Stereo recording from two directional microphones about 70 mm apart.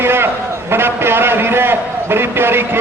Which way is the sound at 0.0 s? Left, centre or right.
Right.